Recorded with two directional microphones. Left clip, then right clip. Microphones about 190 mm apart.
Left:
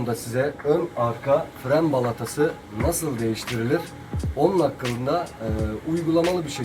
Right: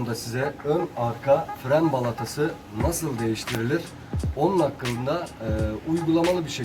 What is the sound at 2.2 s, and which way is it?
Speech, centre (ahead or behind).